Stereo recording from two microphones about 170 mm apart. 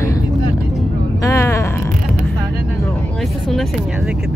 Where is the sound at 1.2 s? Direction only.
15° left (ahead or behind).